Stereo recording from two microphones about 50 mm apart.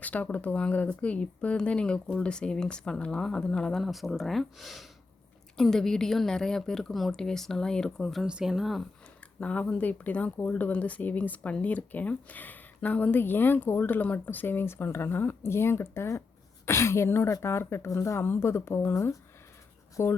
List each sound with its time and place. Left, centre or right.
0.0 s speech: left; by 3.8 s centre
3.8 s speech: centre
5.5 s speech: centre
8.2 s speech: centre
9.4 s speech: left
18.3 s speech: left
20.0 s speech: left